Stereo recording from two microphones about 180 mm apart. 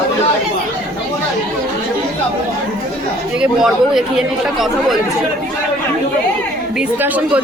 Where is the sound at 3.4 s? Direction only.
Centre (ahead or behind).